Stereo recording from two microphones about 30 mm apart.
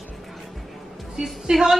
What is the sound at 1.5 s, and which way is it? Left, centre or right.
Speech, right.